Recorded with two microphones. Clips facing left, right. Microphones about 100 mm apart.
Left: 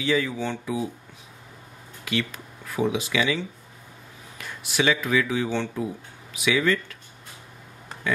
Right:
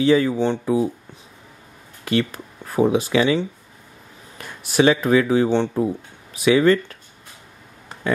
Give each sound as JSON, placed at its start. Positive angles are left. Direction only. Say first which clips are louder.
{"t": 0.0, "sound": "speech", "louder": "right 8 dB", "side_deg": -40}
{"t": 2.0, "sound": "speech", "louder": "right 7 dB", "side_deg": -40}